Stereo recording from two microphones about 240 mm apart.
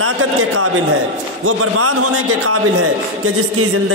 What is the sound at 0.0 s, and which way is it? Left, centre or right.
A man's voice, right.